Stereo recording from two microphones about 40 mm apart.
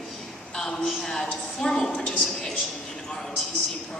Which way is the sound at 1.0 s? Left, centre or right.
Centre.